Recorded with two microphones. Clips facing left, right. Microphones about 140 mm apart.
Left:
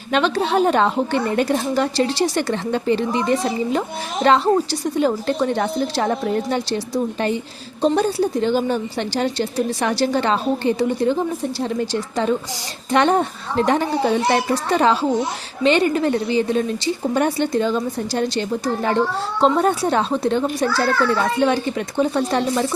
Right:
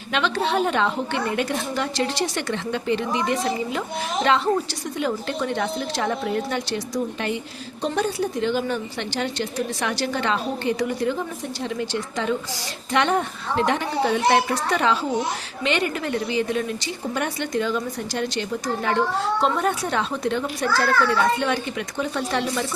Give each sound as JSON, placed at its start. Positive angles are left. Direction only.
{"t": 0.1, "sound": "a woman's voice", "side_deg": 40}